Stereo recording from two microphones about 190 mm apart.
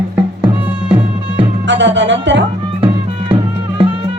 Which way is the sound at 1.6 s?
70° right (ahead or behind).